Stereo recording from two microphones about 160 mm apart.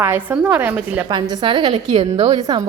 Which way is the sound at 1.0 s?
30° right (ahead or behind).